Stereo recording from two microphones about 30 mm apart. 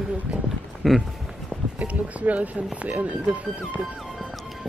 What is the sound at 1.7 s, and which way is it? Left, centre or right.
Speech, right.